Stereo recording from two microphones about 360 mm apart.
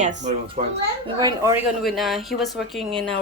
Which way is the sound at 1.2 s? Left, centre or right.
Centre.